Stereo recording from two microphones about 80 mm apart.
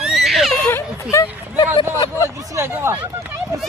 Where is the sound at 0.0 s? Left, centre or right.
Centre.